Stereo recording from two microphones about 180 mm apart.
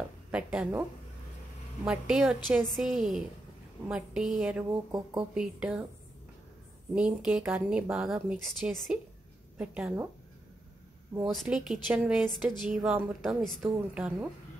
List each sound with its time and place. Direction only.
0.3 s a woman's voice: 5° right (ahead or behind)
1.9 s a woman's voice: 5° right (ahead or behind)
6.9 s a woman's voice: 5° right (ahead or behind)
11.2 s a woman's voice: centre (ahead or behind)